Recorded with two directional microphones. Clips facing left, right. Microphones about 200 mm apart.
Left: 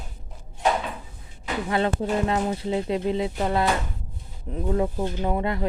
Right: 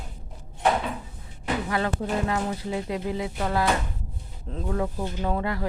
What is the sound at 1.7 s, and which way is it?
Speech, 25° left (ahead or behind).